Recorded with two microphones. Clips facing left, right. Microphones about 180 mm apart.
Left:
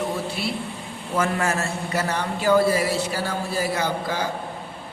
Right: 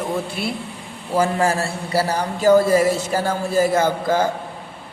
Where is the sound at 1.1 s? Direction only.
30° right (ahead or behind).